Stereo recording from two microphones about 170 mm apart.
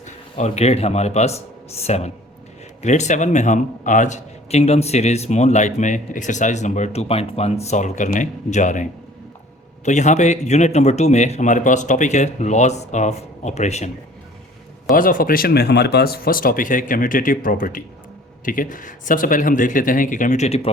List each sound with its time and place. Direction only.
0.0 s a man's voice: 40° left (ahead or behind)
14.9 s a man's voice: 55° left (ahead or behind)